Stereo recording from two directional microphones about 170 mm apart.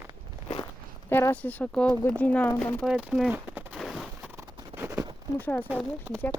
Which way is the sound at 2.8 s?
5° right (ahead or behind).